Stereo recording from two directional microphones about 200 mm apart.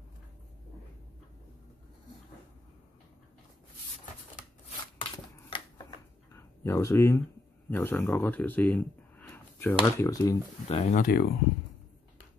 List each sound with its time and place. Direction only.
4.9 s shuffling cards: 25° left (ahead or behind)
6.3 s speech: 15° left (ahead or behind)
9.3 s a sound: 10° left (ahead or behind)
9.9 s speech: 15° left (ahead or behind)
10.7 s speech: 35° left (ahead or behind)